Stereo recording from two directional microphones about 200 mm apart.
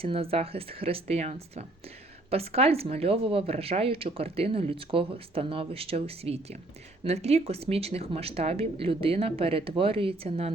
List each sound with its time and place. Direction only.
0.0 s speech: 30° right (ahead or behind)